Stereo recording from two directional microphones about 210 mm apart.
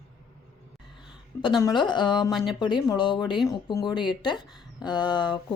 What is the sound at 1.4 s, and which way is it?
Speech, 20° left (ahead or behind).